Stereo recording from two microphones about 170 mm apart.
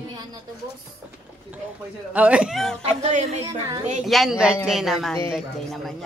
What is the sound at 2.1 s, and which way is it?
Speech, 10° right (ahead or behind).